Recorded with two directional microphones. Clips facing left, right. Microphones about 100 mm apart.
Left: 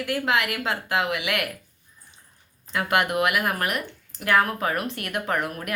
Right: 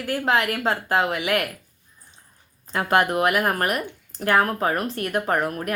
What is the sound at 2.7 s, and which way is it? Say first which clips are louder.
Speech: right 3 dB; 35° right (ahead or behind).